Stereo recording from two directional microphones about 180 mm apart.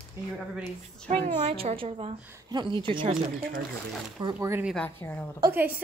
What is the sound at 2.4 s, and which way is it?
Speech, 25° right (ahead or behind).